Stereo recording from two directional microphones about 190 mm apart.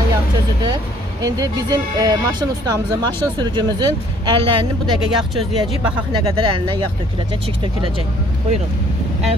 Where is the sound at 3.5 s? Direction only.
25° right (ahead or behind).